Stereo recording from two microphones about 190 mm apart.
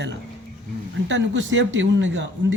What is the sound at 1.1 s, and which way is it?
A man's voice, 75° right (ahead or behind).